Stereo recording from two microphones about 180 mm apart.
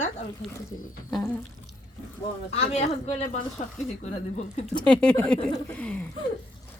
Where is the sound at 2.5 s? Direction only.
35° left (ahead or behind).